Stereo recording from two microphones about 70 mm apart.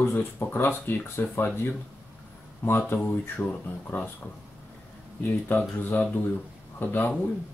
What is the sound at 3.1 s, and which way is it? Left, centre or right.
Speech, left.